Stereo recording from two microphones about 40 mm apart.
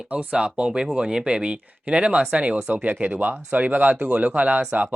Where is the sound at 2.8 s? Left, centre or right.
Right.